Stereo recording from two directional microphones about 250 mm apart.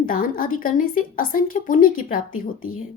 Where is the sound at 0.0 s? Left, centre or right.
Left.